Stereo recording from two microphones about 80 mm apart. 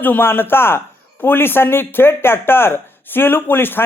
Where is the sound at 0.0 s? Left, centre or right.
Left.